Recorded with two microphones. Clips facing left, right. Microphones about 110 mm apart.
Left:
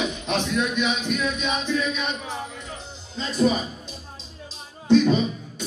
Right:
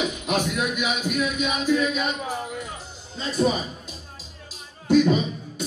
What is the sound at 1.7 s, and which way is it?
Music, 45° right (ahead or behind).